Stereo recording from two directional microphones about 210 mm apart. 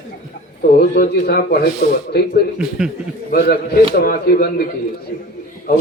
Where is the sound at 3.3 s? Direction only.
50° left (ahead or behind).